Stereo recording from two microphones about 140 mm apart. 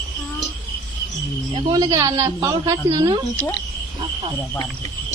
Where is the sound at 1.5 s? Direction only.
25° right (ahead or behind).